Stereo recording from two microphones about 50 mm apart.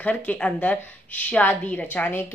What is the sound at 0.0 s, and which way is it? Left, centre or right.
A woman's voice, left.